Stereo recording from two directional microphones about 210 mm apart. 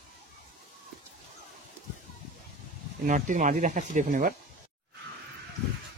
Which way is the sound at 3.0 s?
35° right (ahead or behind).